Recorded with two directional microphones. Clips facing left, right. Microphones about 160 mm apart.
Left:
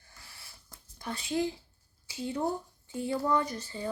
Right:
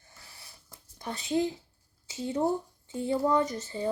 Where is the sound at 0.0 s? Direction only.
20° right (ahead or behind).